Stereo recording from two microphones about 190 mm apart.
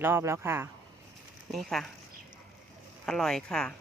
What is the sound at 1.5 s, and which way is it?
Speech, centre (ahead or behind).